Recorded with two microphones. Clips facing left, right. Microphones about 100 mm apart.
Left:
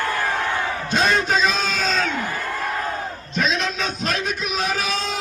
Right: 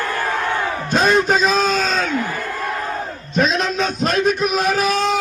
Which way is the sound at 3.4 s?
45° right (ahead or behind).